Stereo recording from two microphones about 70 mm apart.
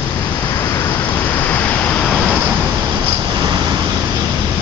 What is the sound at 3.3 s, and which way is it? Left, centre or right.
Vehicle, right.